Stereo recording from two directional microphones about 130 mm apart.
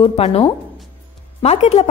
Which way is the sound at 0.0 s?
45° left (ahead or behind).